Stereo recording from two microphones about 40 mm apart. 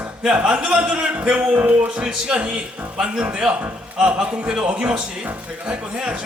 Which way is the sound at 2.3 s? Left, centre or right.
Centre.